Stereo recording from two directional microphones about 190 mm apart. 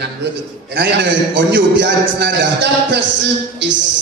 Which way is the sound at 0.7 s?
65° right (ahead or behind).